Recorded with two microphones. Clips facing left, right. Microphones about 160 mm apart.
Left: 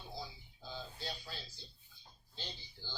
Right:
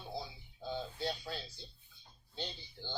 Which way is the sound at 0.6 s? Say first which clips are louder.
Right 8 dB; 60° right (ahead or behind).